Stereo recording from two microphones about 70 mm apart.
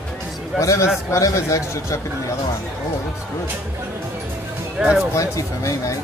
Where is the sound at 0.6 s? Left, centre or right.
Left.